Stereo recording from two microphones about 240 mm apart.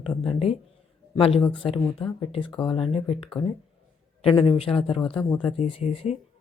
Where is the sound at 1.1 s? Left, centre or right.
Left.